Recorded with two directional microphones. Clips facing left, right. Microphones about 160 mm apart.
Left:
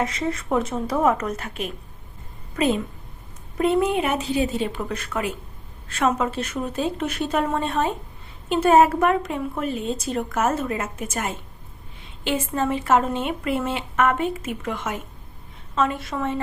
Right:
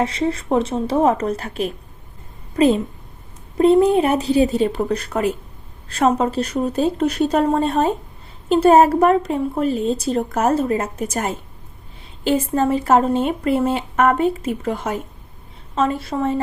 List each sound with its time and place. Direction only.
0.0 s a woman's voice: 30° right (ahead or behind)